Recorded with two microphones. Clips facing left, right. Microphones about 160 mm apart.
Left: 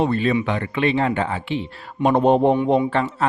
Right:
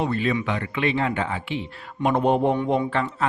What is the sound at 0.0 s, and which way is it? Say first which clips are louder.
Speech: left 4 dB; 35° left (ahead or behind).